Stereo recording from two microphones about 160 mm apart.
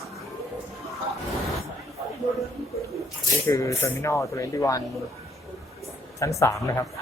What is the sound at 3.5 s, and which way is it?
Speech, 20° left (ahead or behind).